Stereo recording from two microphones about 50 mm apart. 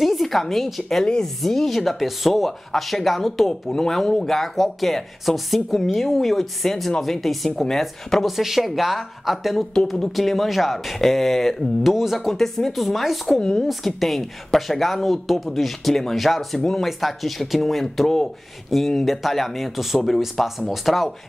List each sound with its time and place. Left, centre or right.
0.0 s a woman's voice: centre
0.8 s a woman's voice: centre
13.4 s a woman's voice: centre
13.7 s speech: centre